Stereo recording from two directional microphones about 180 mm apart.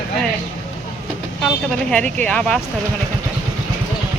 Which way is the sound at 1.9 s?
5° left (ahead or behind).